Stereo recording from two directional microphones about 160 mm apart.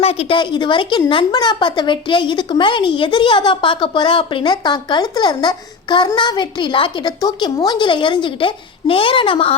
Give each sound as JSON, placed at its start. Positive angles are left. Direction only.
{"t": 0.0, "sound": "a woman's voice", "side_deg": 40}